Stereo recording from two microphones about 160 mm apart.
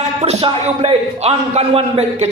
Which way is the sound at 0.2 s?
40° right (ahead or behind).